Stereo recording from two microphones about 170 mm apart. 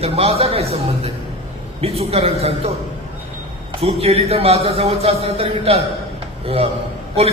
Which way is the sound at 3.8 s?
35° right (ahead or behind).